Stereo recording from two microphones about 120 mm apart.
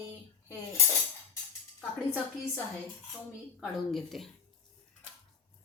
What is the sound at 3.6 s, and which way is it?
Speech, centre (ahead or behind).